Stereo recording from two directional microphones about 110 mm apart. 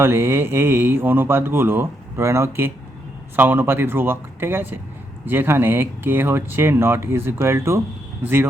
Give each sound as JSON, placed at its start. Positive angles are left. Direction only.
{"t": 0.0, "sound": "speech", "side_deg": -20}